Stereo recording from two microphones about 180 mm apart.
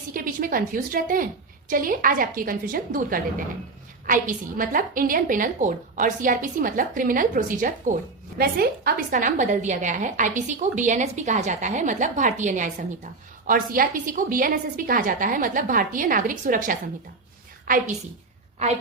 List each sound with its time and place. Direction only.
0.1 s a woman's voice: 50° right (ahead or behind)